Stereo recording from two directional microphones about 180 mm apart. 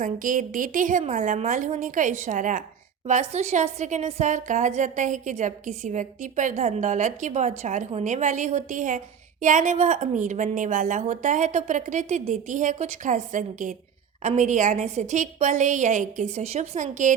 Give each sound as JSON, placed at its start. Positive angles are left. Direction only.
{"t": 0.0, "sound": "a woman's voice", "side_deg": -50}